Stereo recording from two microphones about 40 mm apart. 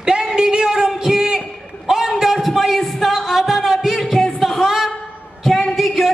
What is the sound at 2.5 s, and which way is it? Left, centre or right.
Music, centre.